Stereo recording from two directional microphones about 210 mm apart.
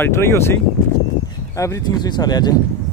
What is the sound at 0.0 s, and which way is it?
Speech, 10° left (ahead or behind).